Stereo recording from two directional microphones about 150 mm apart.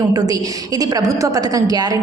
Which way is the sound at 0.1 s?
25° right (ahead or behind).